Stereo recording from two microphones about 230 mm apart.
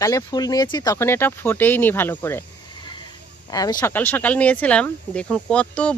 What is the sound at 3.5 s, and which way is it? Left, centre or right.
Speech, centre.